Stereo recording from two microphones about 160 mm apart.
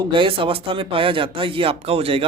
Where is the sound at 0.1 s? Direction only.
35° right (ahead or behind).